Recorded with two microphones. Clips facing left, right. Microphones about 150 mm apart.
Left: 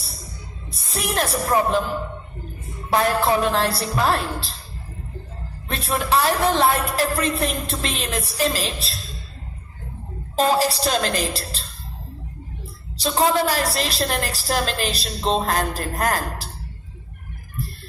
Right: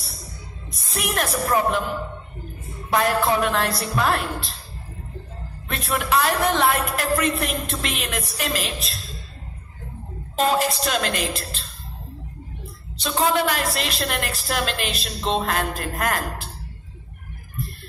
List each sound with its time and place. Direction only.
0.7 s a woman's voice: 30° left (ahead or behind)
2.9 s a woman's voice: 30° left (ahead or behind)
5.6 s a woman's voice: 30° left (ahead or behind)
10.3 s a woman's voice: 35° left (ahead or behind)
12.6 s a woman's voice: 35° left (ahead or behind)